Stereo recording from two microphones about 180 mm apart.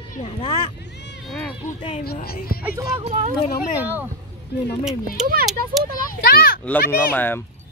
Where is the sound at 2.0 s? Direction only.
60° left (ahead or behind).